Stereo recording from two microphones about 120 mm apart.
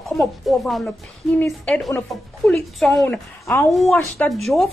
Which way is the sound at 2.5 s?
5° left (ahead or behind).